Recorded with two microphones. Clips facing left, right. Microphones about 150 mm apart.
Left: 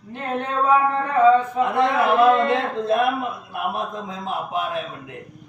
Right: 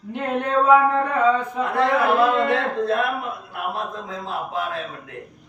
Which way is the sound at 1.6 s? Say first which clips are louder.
Left 1 dB; 20° left (ahead or behind).